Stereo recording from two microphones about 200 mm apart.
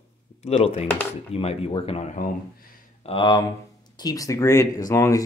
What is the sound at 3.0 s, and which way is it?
Speech, 25° left (ahead or behind).